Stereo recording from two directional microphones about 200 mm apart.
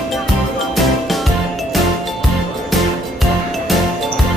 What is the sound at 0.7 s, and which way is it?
Music, centre (ahead or behind).